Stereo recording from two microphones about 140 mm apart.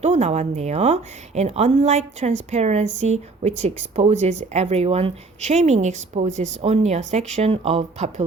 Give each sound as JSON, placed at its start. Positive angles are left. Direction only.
{"t": 0.0, "sound": "a woman's voice", "side_deg": -50}